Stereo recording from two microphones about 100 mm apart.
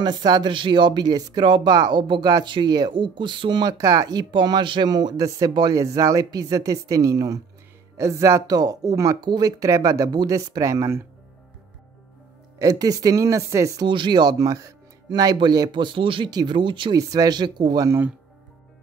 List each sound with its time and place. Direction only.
0.0 s speech: 45° right (ahead or behind); by 11.1 s 30° right (ahead or behind)
12.5 s speech: 35° right (ahead or behind)
13.8 s speech: 50° right (ahead or behind)
16.3 s speech: 45° right (ahead or behind)
17.1 s speech: 40° right (ahead or behind)